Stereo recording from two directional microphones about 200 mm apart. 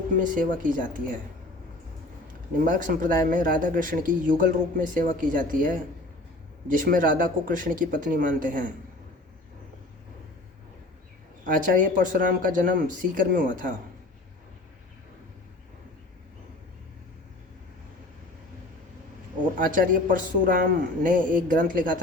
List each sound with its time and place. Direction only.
0.2 s speech: 45° right (ahead or behind)
2.2 s speech: 40° right (ahead or behind)
11.4 s speech: 45° right (ahead or behind)
19.5 s speech: 40° right (ahead or behind)